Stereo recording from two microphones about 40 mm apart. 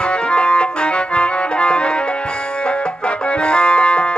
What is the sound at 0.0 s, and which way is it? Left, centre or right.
Music, left.